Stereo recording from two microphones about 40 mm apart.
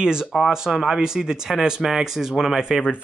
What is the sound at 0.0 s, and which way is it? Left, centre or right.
Speech, centre.